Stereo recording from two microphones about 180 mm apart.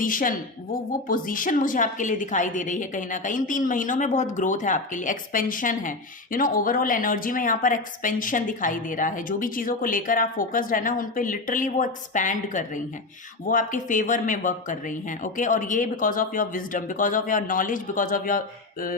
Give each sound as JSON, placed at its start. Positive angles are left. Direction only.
{"t": 0.0, "sound": "a woman's voice", "side_deg": 50}